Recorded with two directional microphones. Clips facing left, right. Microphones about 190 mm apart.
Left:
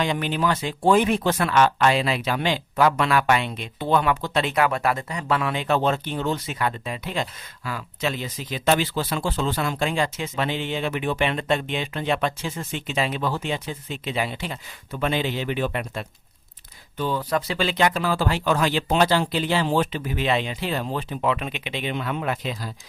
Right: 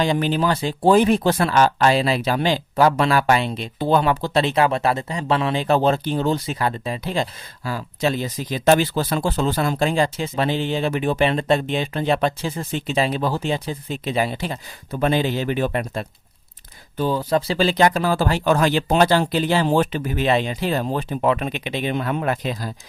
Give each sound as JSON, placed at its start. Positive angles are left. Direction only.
{"t": 0.0, "sound": "speech", "side_deg": -35}